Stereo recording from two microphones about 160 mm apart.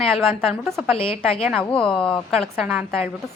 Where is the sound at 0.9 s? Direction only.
35° left (ahead or behind).